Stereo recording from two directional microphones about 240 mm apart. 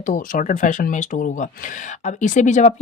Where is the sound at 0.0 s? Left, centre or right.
Left.